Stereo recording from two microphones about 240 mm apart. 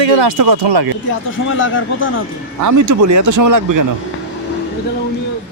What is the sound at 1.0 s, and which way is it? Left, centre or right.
Speech, left.